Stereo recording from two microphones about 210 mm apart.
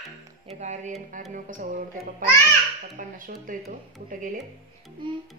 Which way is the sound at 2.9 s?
40° right (ahead or behind).